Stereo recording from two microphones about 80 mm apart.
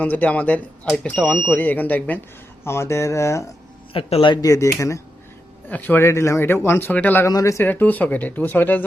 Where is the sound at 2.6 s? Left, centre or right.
Left.